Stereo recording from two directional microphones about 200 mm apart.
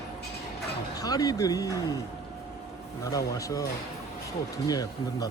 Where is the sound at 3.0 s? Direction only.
15° left (ahead or behind).